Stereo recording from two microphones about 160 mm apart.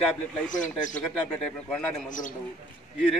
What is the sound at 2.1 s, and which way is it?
Speech, 55° left (ahead or behind).